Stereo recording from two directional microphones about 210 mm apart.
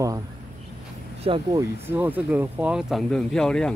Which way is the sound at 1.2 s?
25° right (ahead or behind).